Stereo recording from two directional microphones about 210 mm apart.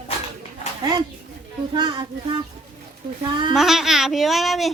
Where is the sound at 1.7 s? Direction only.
20° right (ahead or behind).